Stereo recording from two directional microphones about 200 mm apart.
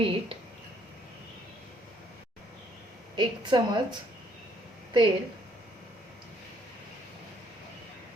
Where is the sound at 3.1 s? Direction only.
20° right (ahead or behind).